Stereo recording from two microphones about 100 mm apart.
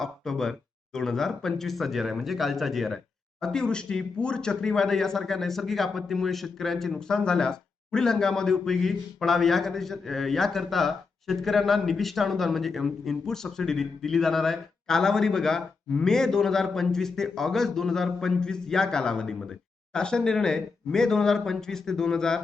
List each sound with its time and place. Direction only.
0.0 s speech: 5° left (ahead or behind)